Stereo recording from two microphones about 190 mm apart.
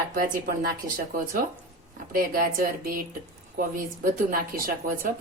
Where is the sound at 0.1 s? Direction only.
45° right (ahead or behind).